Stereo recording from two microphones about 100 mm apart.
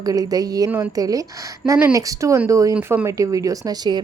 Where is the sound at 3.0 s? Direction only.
35° right (ahead or behind).